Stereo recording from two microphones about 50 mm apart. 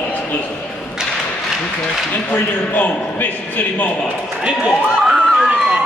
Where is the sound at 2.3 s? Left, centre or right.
Left.